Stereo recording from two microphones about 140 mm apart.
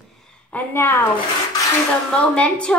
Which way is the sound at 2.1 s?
10° left (ahead or behind).